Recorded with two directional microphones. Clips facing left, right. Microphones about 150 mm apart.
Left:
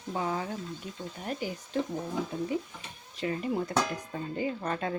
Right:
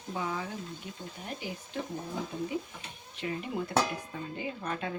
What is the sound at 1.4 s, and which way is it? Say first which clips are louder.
Speech: left 4 dB; 45° left (ahead or behind).